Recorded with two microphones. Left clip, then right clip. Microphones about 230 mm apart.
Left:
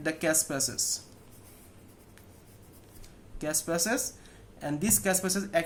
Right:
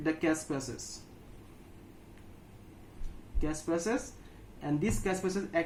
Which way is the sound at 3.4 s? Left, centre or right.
Left.